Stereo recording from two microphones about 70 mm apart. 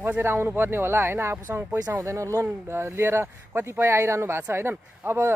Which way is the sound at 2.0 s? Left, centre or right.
Right.